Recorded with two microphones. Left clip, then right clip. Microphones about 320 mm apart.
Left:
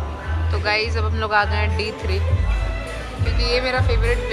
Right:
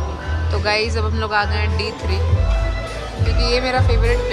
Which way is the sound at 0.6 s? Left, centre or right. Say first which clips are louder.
Right 2 dB; centre.